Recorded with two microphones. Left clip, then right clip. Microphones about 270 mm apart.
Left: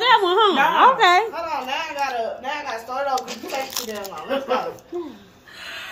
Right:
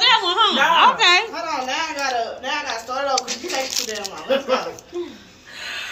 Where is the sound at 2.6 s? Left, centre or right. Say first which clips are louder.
Right 2 dB; left.